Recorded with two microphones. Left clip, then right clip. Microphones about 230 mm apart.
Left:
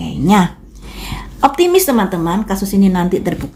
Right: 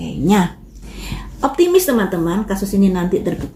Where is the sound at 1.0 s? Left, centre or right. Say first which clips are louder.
Left 7 dB; left.